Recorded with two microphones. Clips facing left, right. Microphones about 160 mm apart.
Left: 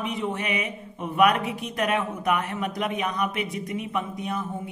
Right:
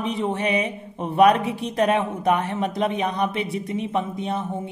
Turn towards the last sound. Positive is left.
turn(degrees=-25)  # may be behind; listen again after turning